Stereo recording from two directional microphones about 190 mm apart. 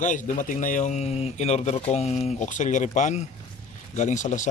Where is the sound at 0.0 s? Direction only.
40° left (ahead or behind).